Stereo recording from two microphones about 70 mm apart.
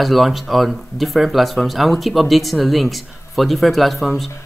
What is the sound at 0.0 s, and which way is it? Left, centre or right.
Speech, centre.